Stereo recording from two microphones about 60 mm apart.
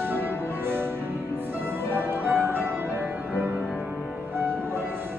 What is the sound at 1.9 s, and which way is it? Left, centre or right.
Music, right.